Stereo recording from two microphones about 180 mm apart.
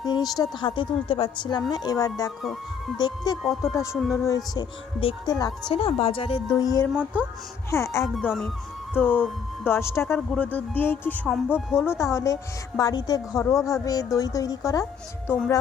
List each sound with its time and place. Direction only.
0.0 s speech: 20° left (ahead or behind)
2.4 s speech: centre (ahead or behind)
4.1 s speech: 15° left (ahead or behind)
5.7 s speech: 30° left (ahead or behind)
6.9 s speech: 10° right (ahead or behind)
7.7 s a woman's voice: 15° left (ahead or behind)
8.0 s a woman's voice: centre (ahead or behind)
11.3 s speech: 5° right (ahead or behind)
11.8 s a woman's voice: 15° left (ahead or behind)